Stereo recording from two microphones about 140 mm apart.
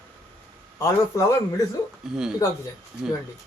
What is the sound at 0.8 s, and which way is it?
Speech, 20° left (ahead or behind).